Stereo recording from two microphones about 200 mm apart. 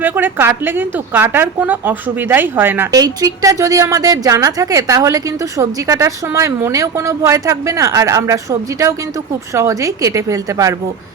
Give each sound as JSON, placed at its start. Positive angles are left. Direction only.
{"t": 0.0, "sound": "a woman's voice", "side_deg": -10}